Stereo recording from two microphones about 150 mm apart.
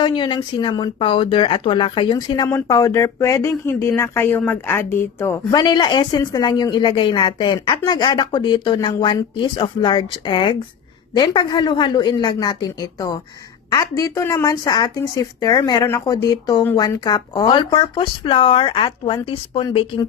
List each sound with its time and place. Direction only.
0.0 s a woman's voice: 30° left (ahead or behind)